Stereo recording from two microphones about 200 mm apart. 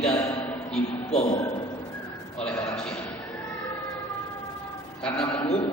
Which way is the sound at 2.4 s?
5° left (ahead or behind).